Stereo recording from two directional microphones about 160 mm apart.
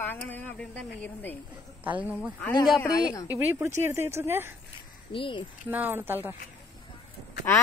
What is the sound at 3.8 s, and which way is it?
Speech, 15° right (ahead or behind).